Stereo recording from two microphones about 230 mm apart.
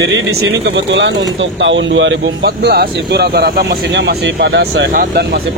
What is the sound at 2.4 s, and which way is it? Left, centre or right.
Speech, right.